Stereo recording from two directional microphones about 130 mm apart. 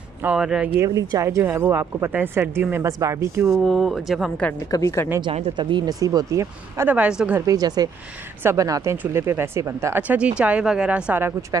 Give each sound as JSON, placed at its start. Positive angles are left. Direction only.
{"t": 0.2, "sound": "a woman's voice", "side_deg": -5}
{"t": 0.7, "sound": "speech", "side_deg": -25}
{"t": 3.6, "sound": "speech", "side_deg": 0}
{"t": 4.6, "sound": "a woman's voice", "side_deg": 25}
{"t": 5.6, "sound": "speech", "side_deg": -35}
{"t": 6.9, "sound": "a woman's voice", "side_deg": -10}
{"t": 7.3, "sound": "a woman's voice", "side_deg": -25}